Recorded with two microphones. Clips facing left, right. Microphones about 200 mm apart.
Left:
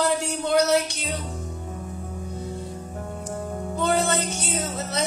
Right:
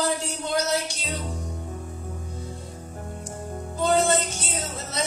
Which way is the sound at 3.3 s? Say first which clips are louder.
Left 6 dB; 60° left (ahead or behind).